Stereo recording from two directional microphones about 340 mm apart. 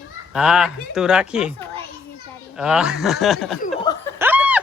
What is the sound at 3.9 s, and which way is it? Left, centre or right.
Snicker, centre.